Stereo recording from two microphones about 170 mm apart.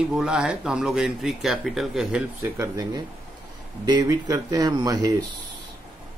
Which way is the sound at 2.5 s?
20° right (ahead or behind).